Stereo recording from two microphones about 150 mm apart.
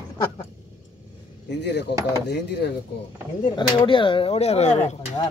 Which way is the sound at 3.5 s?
35° left (ahead or behind).